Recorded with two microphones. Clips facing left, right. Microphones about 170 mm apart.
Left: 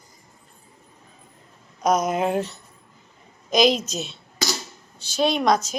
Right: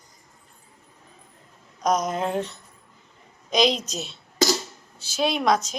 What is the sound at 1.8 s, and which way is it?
A woman's voice, 5° left (ahead or behind).